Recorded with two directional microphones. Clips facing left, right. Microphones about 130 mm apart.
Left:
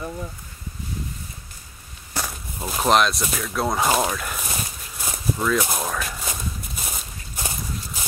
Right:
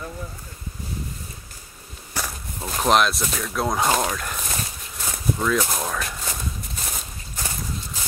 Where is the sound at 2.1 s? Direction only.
10° left (ahead or behind).